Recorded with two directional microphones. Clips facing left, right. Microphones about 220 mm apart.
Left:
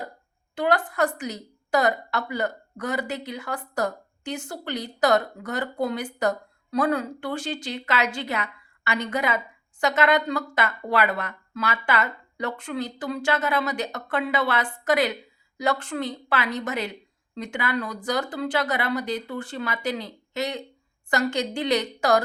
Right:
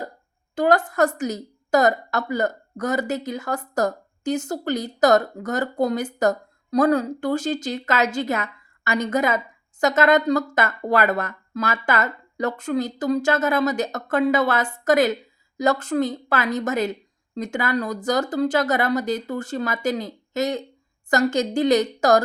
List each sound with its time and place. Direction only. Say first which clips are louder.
0.5 s a woman's voice: right 5 dB; 45° right (ahead or behind)